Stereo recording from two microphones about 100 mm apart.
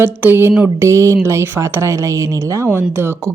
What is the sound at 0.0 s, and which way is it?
Speech, 20° right (ahead or behind).